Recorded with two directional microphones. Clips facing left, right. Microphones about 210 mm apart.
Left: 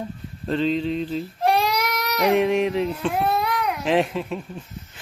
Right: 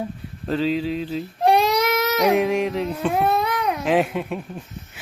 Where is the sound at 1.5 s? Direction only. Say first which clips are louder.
Right 4 dB; 20° right (ahead or behind).